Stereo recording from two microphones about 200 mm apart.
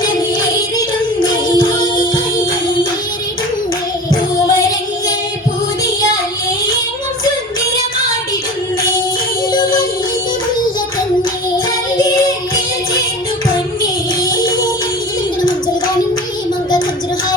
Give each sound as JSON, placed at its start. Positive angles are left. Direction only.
{"t": 1.2, "sound": "music", "side_deg": 20}